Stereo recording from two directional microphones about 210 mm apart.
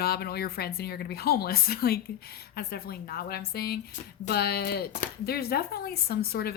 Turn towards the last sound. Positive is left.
turn(degrees=45)  # may be behind; listen again after turning